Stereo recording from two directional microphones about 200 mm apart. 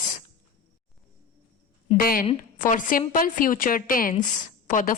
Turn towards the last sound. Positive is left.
turn(degrees=40)  # may be behind; listen again after turning